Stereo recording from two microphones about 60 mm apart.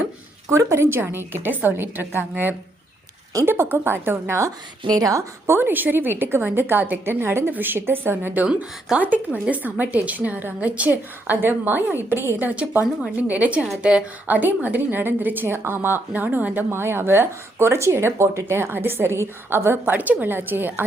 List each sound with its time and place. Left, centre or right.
0.5 s speech: right
4.9 s a woman's voice: right
5.5 s a woman's voice: right
12.4 s a woman's voice: right
14.3 s speech: right